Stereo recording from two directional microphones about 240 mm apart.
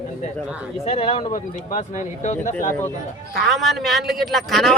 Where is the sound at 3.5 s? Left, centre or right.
Centre.